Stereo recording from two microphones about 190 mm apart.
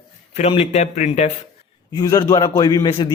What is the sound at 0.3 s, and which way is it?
Speech, 35° left (ahead or behind).